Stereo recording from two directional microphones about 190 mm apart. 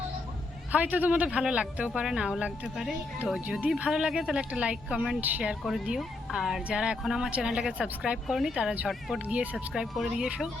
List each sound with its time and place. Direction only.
0.7 s speech: 10° right (ahead or behind)